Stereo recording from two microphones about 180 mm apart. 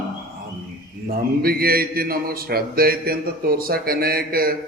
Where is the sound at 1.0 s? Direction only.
55° right (ahead or behind).